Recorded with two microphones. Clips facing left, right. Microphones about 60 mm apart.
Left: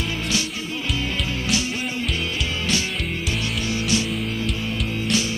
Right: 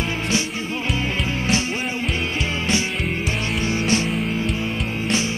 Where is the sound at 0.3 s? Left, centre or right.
Right.